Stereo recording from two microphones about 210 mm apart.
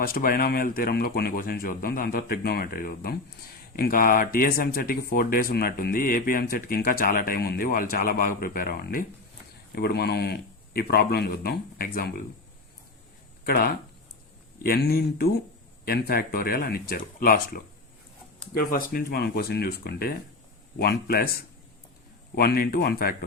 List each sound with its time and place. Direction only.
0.0 s speech: 45° left (ahead or behind)
13.4 s speech: 45° left (ahead or behind)
18.7 s speech: 45° left (ahead or behind)
22.4 s speech: 45° left (ahead or behind)